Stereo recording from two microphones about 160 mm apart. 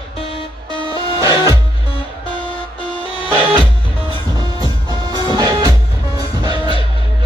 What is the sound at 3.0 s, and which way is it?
Music, 35° left (ahead or behind).